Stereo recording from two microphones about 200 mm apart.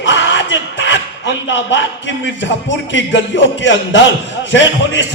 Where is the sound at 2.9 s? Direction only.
65° left (ahead or behind).